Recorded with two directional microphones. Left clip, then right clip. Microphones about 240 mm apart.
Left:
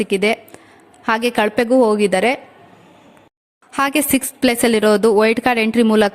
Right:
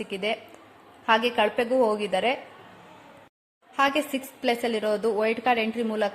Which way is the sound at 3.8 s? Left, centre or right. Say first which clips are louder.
Left 7 dB; left.